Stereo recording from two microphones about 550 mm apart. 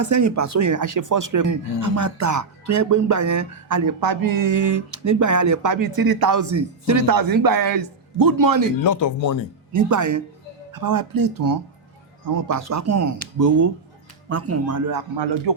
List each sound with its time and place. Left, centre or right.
0.0 s speech: right
8.8 s speech: left
9.7 s speech: right